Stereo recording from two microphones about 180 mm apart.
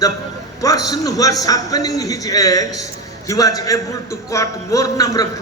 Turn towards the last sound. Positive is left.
turn(degrees=20)  # may be behind; listen again after turning